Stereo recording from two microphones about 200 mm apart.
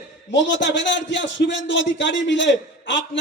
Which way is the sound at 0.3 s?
65° left (ahead or behind).